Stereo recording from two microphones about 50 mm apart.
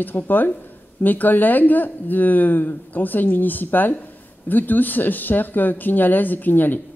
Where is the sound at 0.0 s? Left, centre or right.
Left.